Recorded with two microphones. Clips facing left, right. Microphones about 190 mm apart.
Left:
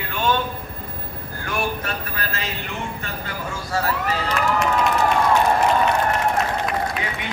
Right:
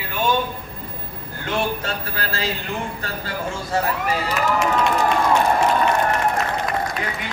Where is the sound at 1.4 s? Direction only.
25° right (ahead or behind).